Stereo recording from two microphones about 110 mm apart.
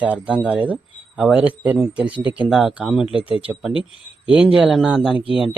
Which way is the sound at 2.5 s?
5° right (ahead or behind).